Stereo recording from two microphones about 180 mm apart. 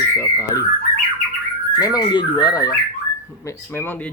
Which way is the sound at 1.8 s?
20° left (ahead or behind).